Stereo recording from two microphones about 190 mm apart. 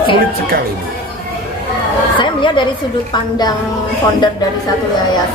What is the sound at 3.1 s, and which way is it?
Speech, 20° left (ahead or behind).